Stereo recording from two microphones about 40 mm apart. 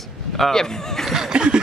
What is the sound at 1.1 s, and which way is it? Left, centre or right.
Chuckle, centre.